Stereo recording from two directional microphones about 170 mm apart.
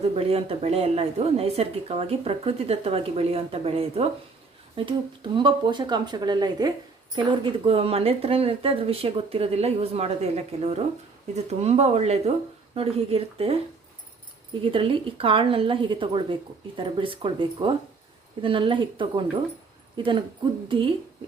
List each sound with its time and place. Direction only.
0.2 s a woman's voice: 35° right (ahead or behind)
14.6 s a woman's voice: 30° right (ahead or behind)